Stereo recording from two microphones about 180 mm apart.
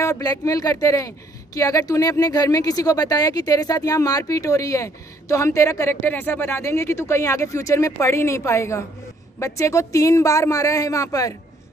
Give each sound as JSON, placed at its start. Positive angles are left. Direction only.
{"t": 0.0, "sound": "speech", "side_deg": 20}